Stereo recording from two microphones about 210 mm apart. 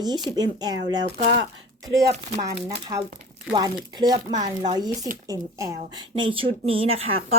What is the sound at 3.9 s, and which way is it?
Speech, 20° right (ahead or behind).